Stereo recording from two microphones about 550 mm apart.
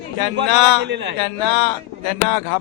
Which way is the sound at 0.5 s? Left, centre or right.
Left.